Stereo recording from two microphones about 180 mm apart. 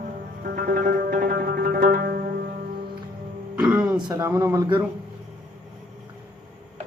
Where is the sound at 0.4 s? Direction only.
55° right (ahead or behind).